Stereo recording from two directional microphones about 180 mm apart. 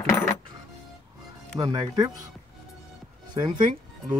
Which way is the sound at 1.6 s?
20° right (ahead or behind).